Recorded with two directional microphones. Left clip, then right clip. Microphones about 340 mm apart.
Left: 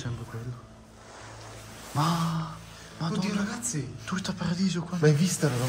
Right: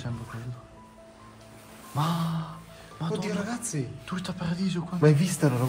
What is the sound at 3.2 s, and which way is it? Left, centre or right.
Speech, centre.